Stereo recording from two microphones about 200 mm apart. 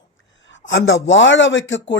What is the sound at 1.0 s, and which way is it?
Speech, 65° left (ahead or behind).